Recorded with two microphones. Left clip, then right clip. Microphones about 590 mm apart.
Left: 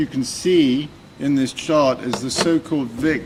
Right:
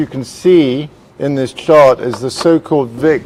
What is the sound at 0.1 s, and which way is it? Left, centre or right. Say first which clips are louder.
Speech: right 8 dB; right.